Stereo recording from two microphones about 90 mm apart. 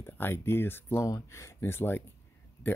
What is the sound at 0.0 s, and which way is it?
Speech, 25° left (ahead or behind).